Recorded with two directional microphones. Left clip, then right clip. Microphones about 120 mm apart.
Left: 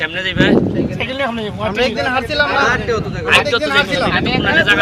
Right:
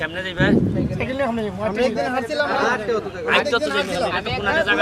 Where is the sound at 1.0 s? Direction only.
10° left (ahead or behind).